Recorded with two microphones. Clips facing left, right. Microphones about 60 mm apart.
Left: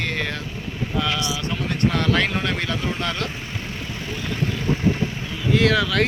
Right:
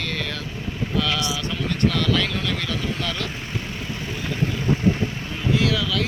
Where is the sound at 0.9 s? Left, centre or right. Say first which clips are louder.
Even; left.